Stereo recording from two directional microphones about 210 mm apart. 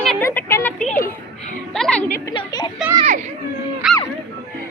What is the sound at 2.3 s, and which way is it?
Speech, 20° left (ahead or behind).